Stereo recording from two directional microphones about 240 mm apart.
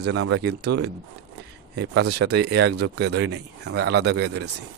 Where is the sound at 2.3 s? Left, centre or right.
Right.